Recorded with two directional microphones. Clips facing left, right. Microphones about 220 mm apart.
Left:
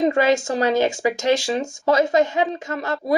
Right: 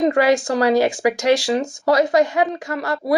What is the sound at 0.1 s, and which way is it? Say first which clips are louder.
Speech: right 2 dB; 25° left (ahead or behind).